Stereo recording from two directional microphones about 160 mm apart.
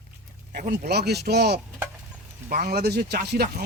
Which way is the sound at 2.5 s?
65° right (ahead or behind).